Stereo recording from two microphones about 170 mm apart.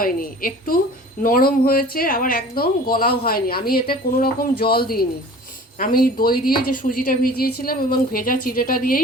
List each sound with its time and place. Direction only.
0.0 s speech: 55° left (ahead or behind)